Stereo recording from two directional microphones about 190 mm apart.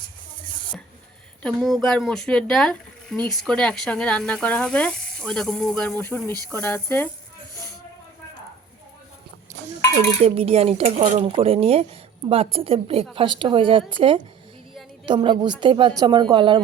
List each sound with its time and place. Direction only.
1.4 s speech: 5° left (ahead or behind)
10.2 s speech: 30° right (ahead or behind)